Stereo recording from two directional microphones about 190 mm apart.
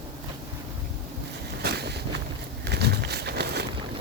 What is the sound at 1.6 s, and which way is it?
Vehicle, 60° right (ahead or behind).